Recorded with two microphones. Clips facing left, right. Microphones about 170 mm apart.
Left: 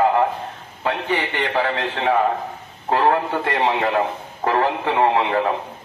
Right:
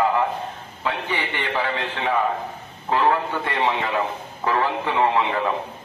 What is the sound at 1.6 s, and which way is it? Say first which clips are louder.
A man's voice: left 4 dB; 40° left (ahead or behind).